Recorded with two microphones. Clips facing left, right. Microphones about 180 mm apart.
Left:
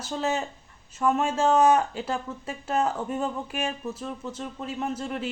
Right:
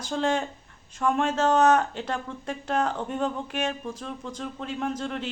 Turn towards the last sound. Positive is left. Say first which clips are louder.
# right 1 dB
turn(degrees=5)  # may be behind; listen again after turning